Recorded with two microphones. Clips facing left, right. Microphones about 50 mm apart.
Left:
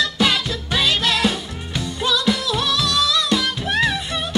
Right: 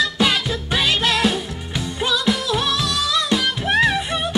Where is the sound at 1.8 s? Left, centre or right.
Centre.